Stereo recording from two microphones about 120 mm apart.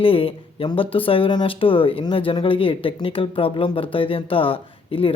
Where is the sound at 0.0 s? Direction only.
50° left (ahead or behind).